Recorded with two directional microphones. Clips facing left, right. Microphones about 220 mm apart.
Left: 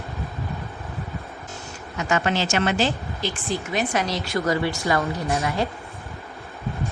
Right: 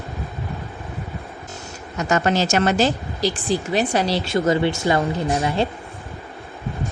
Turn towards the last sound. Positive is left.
turn(degrees=-30)  # may be behind; listen again after turning